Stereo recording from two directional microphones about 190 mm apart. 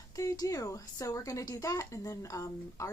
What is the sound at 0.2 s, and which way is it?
A woman's voice, 15° left (ahead or behind).